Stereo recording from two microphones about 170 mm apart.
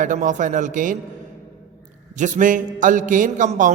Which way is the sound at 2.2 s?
50° right (ahead or behind).